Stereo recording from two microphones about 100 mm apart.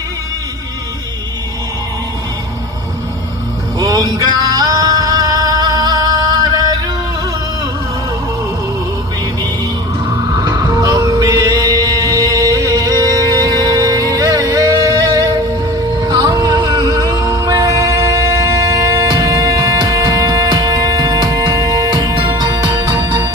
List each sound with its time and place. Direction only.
3.8 s music: 45° right (ahead or behind)
10.3 s music: 45° right (ahead or behind)